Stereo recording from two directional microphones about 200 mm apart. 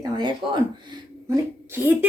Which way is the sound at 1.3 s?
10° right (ahead or behind).